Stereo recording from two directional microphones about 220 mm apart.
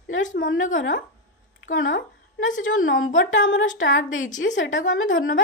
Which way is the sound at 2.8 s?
65° left (ahead or behind).